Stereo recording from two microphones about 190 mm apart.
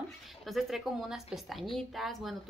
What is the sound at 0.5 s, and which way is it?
A woman's voice, centre (ahead or behind).